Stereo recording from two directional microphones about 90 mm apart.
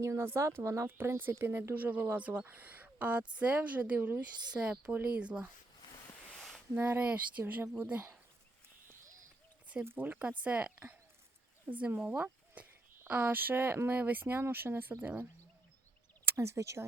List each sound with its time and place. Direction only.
0.0 s speech: 30° right (ahead or behind); by 5.5 s 15° right (ahead or behind)
6.7 s speech: 25° right (ahead or behind)
9.8 s speech: 25° right (ahead or behind)